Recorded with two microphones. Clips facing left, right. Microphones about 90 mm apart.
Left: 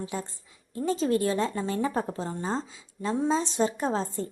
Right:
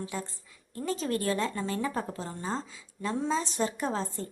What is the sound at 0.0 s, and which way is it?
A woman's voice, 25° left (ahead or behind).